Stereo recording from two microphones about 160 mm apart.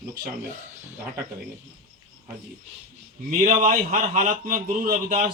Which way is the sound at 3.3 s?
55° right (ahead or behind).